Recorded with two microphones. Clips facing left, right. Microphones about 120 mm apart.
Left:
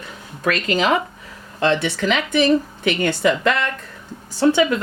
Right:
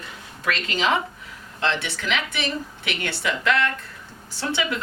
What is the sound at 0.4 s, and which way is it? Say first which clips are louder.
Speech: left 5 dB; 45° left (ahead or behind).